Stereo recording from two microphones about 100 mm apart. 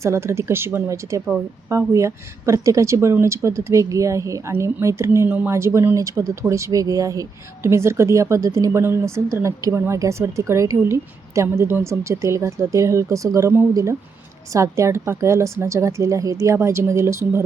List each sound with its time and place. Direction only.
0.0 s a woman's voice: 30° right (ahead or behind)